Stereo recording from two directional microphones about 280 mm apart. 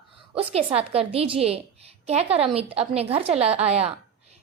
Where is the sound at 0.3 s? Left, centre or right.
Right.